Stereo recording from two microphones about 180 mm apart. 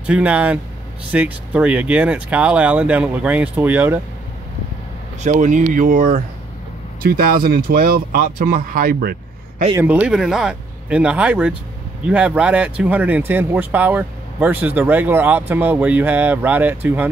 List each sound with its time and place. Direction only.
0.0 s speech: 5° right (ahead or behind)
5.2 s speech: 45° right (ahead or behind)
9.8 s speech: 10° right (ahead or behind)